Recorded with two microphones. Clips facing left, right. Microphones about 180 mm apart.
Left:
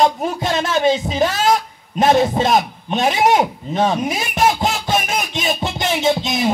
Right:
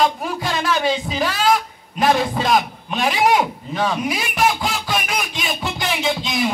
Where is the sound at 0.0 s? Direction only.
25° left (ahead or behind).